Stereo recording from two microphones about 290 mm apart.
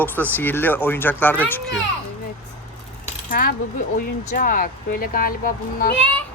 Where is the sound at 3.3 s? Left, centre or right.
Left.